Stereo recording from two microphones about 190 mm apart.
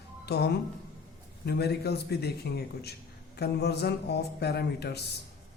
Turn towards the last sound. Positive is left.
turn(degrees=60)  # may be behind; listen again after turning